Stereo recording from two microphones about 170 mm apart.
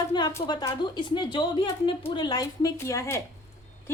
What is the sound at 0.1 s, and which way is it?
Speech, 25° left (ahead or behind).